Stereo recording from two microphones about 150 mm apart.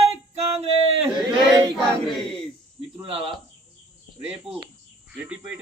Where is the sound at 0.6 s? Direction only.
40° right (ahead or behind).